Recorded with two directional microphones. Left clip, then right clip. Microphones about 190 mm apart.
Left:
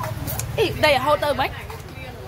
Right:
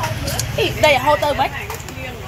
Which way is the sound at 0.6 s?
45° left (ahead or behind).